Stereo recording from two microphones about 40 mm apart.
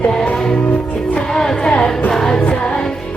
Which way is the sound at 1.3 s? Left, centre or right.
Centre.